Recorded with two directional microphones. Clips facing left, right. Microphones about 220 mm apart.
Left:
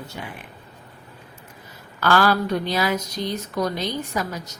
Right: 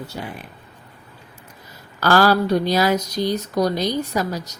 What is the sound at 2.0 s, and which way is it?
Speech, 40° right (ahead or behind).